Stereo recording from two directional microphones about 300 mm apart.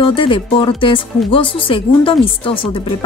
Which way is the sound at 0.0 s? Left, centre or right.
Centre.